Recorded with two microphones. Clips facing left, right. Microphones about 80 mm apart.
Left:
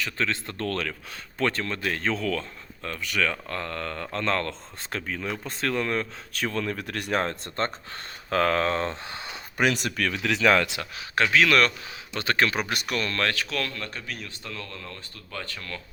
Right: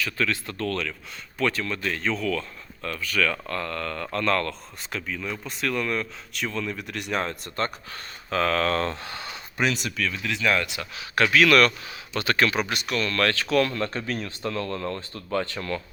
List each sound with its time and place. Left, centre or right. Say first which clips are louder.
0.0 s speech: right 2 dB; left
2.8 s speech: right 2 dB; left
4.9 s speech: even; left
6.4 s speech: left 1 dB; left
8.3 s speech: left 1 dB; left
8.7 s speech: right 2 dB; left
9.6 s speech: left 1 dB; left
10.1 s speech: left 4 dB; left
11.2 s speech: right 2 dB; left
12.6 s speech: right 1 dB; left
13.2 s speech: right 2 dB; centre
13.5 s speech: right 9 dB; centre
13.7 s speech: right 7 dB; right